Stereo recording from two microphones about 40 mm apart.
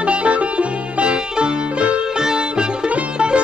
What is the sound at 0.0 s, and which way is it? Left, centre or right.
Music, right.